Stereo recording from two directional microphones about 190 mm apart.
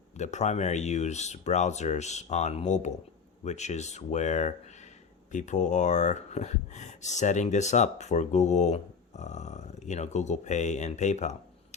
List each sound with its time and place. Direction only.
0.2 s speech: 35° left (ahead or behind)